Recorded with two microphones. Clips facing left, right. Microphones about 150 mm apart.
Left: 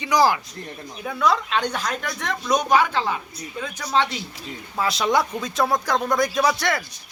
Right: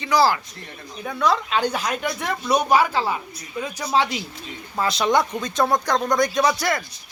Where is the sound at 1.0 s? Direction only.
Centre (ahead or behind).